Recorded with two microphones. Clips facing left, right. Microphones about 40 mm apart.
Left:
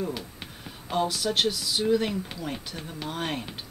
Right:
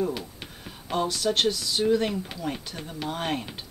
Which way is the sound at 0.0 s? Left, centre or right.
Centre.